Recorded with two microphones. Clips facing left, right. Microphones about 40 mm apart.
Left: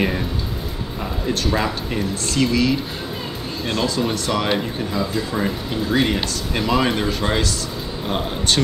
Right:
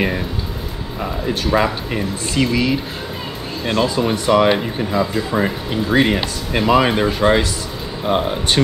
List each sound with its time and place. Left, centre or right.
1.2 s speech: centre